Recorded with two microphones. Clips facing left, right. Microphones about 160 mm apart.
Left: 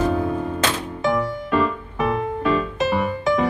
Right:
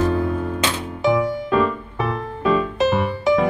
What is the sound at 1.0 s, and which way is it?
Music, centre (ahead or behind).